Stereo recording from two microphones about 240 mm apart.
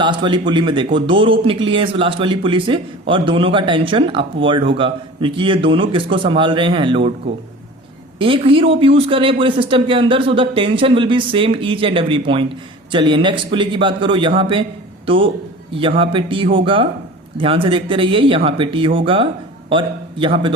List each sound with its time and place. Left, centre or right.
0.0 s speech: centre
8.2 s speech: right